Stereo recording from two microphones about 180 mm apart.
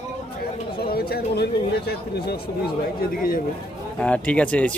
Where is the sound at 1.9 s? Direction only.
60° left (ahead or behind).